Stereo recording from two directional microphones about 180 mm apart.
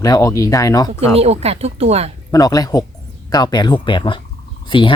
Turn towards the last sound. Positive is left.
turn(degrees=25)  # may be behind; listen again after turning